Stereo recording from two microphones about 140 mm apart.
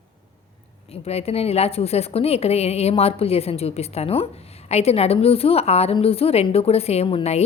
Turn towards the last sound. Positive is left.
turn(degrees=45)  # may be behind; listen again after turning